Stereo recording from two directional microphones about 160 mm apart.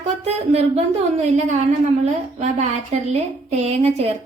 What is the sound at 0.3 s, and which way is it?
A woman's voice, 45° right (ahead or behind).